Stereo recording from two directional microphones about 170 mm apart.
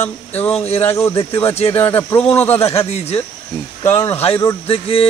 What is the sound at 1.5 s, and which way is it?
Speech, 35° left (ahead or behind).